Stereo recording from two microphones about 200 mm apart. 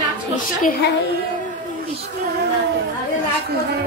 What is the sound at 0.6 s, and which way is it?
Speech, 55° left (ahead or behind).